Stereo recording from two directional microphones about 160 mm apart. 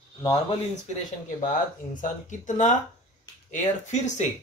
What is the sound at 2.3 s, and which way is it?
Speech, 50° left (ahead or behind).